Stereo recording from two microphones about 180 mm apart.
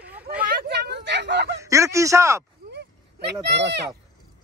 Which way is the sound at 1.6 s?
15° right (ahead or behind).